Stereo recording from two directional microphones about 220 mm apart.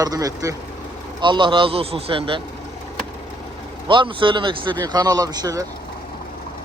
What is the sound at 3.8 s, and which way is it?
Speech, 20° right (ahead or behind).